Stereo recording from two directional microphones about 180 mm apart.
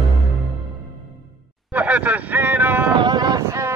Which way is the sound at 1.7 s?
10° right (ahead or behind).